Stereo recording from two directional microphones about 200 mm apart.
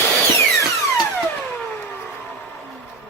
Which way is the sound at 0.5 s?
Centre (ahead or behind).